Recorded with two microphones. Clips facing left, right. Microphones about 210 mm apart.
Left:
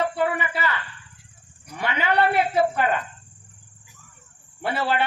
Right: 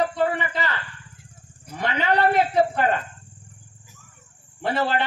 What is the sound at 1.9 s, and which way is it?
Speech, 35° right (ahead or behind).